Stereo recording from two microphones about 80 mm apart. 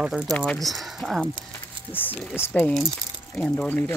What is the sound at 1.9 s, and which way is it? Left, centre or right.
Speech, left.